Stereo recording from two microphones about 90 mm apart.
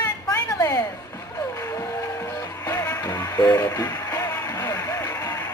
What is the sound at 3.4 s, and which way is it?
Speech, 40° left (ahead or behind).